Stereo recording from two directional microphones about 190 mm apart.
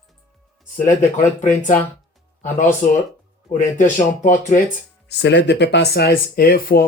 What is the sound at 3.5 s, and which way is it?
Speech, 40° left (ahead or behind).